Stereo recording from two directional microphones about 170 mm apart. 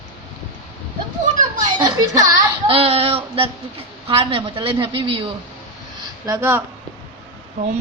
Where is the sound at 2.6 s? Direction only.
35° right (ahead or behind).